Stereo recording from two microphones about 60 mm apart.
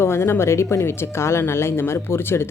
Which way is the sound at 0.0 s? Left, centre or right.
Left.